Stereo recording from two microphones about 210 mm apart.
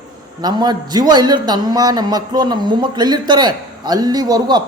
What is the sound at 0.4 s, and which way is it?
A man's voice, 20° right (ahead or behind).